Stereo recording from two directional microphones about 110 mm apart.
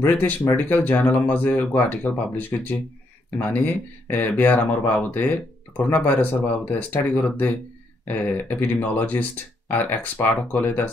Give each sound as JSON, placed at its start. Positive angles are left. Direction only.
{"t": 0.0, "sound": "speech", "side_deg": 15}